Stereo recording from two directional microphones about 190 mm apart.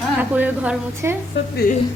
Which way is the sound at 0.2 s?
10° right (ahead or behind).